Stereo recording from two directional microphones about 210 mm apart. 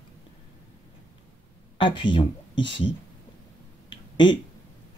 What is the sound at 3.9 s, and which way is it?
Finger snapping, 20° left (ahead or behind).